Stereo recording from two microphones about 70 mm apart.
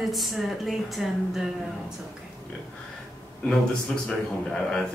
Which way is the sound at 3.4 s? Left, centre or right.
Centre.